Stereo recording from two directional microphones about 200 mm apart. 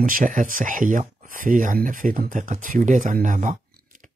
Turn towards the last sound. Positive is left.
turn(degrees=-40)  # may be behind; listen again after turning